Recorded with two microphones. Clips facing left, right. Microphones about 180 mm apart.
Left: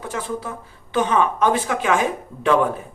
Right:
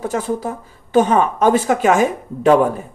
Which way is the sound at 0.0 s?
40° right (ahead or behind).